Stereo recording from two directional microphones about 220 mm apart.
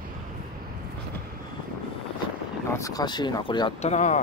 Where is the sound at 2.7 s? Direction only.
15° left (ahead or behind); by 4.2 s 30° left (ahead or behind).